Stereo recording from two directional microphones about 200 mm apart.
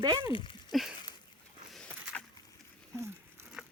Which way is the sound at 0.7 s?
Centre (ahead or behind).